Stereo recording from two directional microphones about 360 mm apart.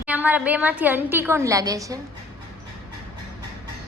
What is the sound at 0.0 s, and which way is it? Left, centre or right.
A woman's voice, centre.